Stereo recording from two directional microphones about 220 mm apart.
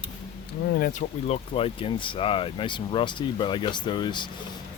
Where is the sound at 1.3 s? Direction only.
25° left (ahead or behind).